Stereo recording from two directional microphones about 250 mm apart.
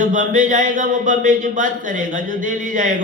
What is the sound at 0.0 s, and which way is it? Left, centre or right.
Speech, right.